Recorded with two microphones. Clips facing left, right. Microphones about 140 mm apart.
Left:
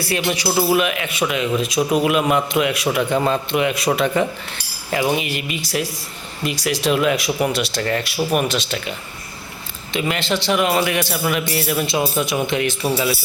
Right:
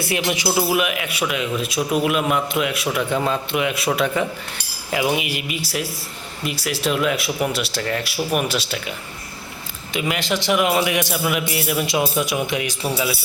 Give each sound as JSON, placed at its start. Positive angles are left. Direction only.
{"t": 0.0, "sound": "a man's voice", "side_deg": -15}
{"t": 9.9, "sound": "a man's voice", "side_deg": -10}